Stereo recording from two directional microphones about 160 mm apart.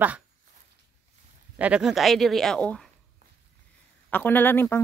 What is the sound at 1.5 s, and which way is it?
Speech, 10° right (ahead or behind).